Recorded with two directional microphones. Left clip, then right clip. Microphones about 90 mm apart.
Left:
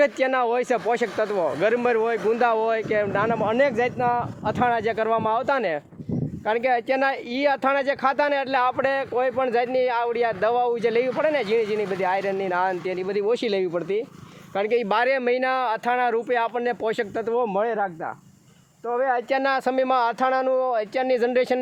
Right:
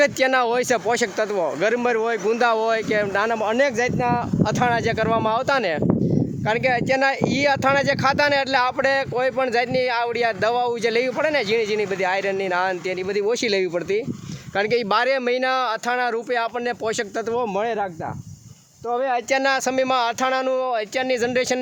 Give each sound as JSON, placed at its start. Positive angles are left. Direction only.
{"t": 0.0, "sound": "speech", "side_deg": -85}
{"t": 6.4, "sound": "speech", "side_deg": -35}
{"t": 13.3, "sound": "speech", "side_deg": -50}
{"t": 14.8, "sound": "speech", "side_deg": -35}
{"t": 15.4, "sound": "speech", "side_deg": -15}
{"t": 16.0, "sound": "speech", "side_deg": 0}
{"t": 17.2, "sound": "speech", "side_deg": -55}
{"t": 19.1, "sound": "speech", "side_deg": -25}